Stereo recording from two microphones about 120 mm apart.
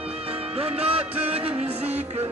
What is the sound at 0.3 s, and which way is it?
Music, 55° right (ahead or behind).